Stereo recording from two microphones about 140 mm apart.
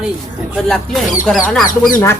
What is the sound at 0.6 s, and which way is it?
Speech, centre (ahead or behind).